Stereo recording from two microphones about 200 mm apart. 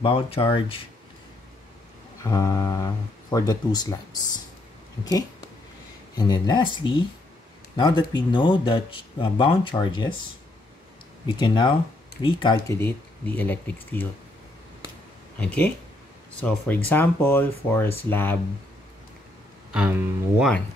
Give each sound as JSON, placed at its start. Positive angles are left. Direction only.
{"t": 0.0, "sound": "speech", "side_deg": 30}
{"t": 2.2, "sound": "speech", "side_deg": 15}
{"t": 5.0, "sound": "speech", "side_deg": 20}
{"t": 11.2, "sound": "speech", "side_deg": 25}
{"t": 15.3, "sound": "speech", "side_deg": 5}
{"t": 19.7, "sound": "speech", "side_deg": -5}